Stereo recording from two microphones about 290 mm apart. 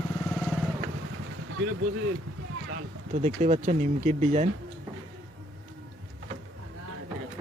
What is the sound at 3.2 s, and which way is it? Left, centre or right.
Speech, right.